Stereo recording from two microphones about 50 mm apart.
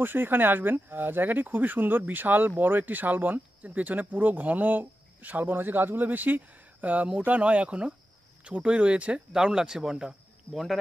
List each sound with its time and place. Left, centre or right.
0.0 s speech: right
9.3 s speech: centre
10.5 s speech: centre